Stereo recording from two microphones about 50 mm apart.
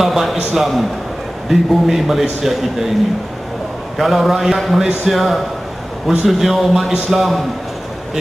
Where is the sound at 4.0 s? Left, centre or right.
Centre.